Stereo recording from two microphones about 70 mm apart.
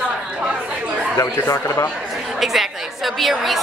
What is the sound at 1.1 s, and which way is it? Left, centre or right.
Speech, left.